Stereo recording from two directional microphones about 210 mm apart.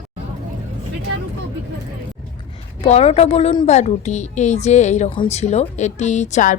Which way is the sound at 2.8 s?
30° left (ahead or behind).